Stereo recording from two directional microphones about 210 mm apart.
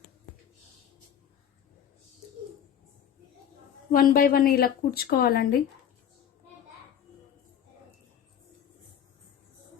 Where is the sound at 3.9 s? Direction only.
40° left (ahead or behind).